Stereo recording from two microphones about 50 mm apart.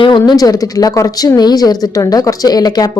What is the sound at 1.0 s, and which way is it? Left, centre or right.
Speech, left.